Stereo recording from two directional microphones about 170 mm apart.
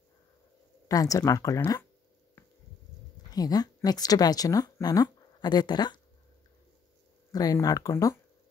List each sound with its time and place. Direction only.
0.8 s speech: 20° left (ahead or behind)
3.3 s a woman's voice: 20° left (ahead or behind)
7.3 s speech: 20° left (ahead or behind)